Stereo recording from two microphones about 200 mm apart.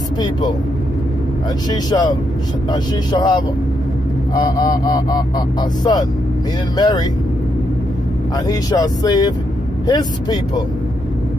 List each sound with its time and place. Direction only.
0.2 s speech: 20° left (ahead or behind)
1.7 s speech: 20° left (ahead or behind)
8.5 s speech: 20° left (ahead or behind)